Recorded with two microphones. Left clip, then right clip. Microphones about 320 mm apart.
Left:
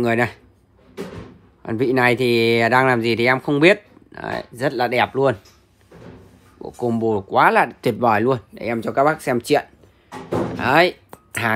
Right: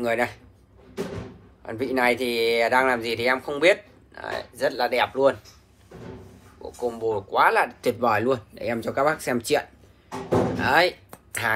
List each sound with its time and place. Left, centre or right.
0.0 s speech: left
1.6 s speech: left
6.9 s speech: left
10.6 s a sound: left